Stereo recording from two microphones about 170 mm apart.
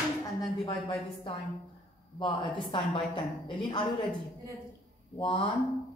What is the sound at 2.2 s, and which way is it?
Speech, 30° left (ahead or behind).